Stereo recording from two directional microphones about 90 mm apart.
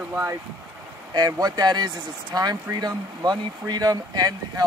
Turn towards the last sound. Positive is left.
turn(degrees=-45)  # may be behind; listen again after turning